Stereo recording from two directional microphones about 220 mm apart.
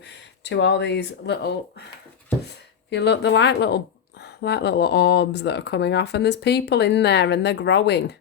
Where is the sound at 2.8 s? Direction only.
50° left (ahead or behind).